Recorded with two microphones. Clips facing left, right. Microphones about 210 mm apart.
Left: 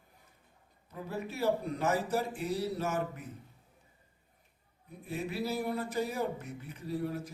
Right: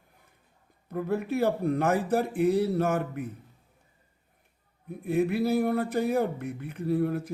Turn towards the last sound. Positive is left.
turn(degrees=-55)  # may be behind; listen again after turning